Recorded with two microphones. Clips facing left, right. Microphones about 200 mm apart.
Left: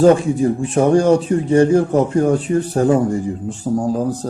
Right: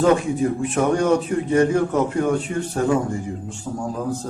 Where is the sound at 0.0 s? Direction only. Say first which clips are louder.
Left 5 dB; 30° left (ahead or behind).